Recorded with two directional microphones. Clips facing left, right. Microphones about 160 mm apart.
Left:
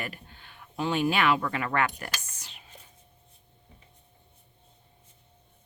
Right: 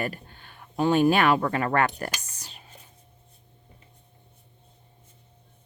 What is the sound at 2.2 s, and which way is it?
Whispering, 35° right (ahead or behind).